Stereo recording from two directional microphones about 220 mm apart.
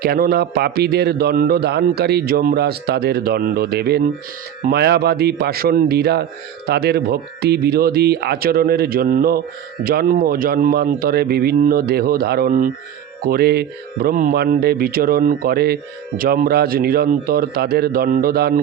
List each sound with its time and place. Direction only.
0.0 s speech: 45° right (ahead or behind)